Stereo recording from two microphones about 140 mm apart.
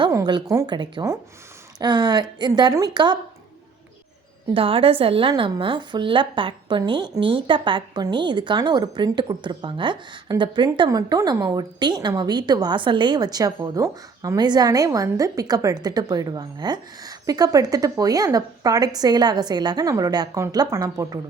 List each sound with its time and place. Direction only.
0.1 s a woman's voice: 30° right (ahead or behind)
4.5 s a woman's voice: 40° right (ahead or behind); by 21.2 s 25° right (ahead or behind)